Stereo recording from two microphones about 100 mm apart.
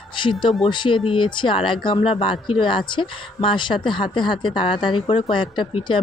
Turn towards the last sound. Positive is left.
turn(degrees=55)  # may be behind; listen again after turning